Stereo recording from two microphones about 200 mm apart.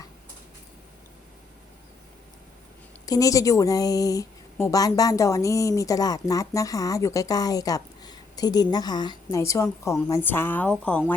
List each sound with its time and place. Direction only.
3.1 s speech: 15° left (ahead or behind)